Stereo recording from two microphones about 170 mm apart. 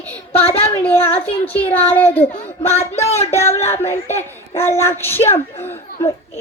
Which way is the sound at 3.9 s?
15° left (ahead or behind).